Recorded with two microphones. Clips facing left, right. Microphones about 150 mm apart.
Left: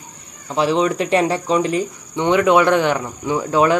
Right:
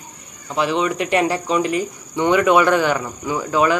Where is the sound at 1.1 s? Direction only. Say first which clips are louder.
Even; centre (ahead or behind).